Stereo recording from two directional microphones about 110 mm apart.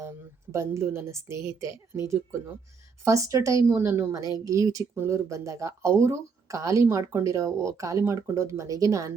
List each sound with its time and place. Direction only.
0.0 s speech: 25° right (ahead or behind)